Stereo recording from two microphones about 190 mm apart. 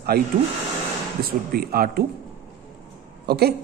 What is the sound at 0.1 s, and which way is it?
A woman's voice, 55° right (ahead or behind).